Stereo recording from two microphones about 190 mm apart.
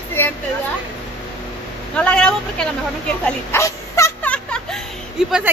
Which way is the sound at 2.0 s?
5° left (ahead or behind).